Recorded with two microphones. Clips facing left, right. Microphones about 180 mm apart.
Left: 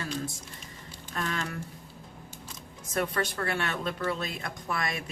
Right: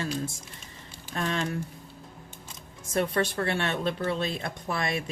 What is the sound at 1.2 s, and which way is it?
Speech, 25° right (ahead or behind).